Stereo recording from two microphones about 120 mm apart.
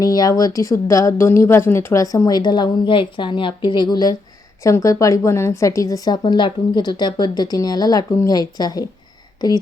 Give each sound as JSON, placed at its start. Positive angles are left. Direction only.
{"t": 0.0, "sound": "a woman's voice", "side_deg": 30}